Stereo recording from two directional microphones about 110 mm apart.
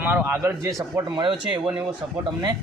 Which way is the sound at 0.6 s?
30° right (ahead or behind).